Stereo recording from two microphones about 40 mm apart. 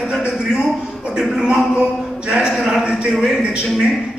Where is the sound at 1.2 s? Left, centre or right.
Centre.